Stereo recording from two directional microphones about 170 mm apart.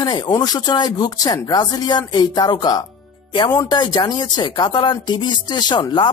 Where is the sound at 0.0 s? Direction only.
25° left (ahead or behind).